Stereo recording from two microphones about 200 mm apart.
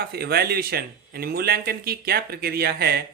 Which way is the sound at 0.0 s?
50° right (ahead or behind).